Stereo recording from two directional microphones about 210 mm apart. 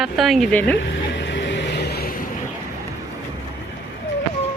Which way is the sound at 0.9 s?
60° left (ahead or behind).